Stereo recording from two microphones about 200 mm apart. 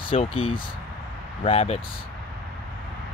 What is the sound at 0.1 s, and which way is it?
Speech, 30° left (ahead or behind).